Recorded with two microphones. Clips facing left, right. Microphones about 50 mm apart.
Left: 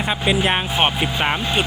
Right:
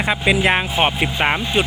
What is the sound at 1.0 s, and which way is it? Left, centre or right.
Speech, right.